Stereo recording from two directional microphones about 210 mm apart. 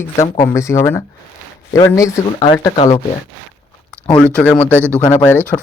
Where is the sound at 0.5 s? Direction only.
15° left (ahead or behind).